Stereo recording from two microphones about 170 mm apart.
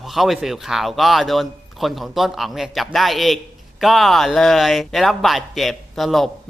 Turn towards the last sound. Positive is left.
turn(degrees=0)  # may be behind; listen again after turning